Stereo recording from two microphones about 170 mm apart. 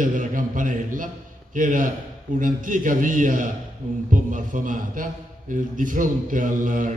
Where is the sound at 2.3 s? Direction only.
50° right (ahead or behind).